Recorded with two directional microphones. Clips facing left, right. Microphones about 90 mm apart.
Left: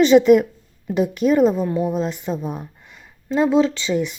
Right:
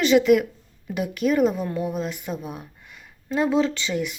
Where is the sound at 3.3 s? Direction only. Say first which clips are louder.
Left 4 dB; 20° left (ahead or behind).